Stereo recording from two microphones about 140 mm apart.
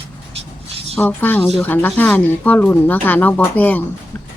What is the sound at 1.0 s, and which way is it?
A woman's voice, 15° left (ahead or behind).